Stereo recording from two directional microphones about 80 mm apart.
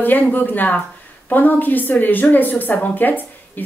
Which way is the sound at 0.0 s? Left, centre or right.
Left.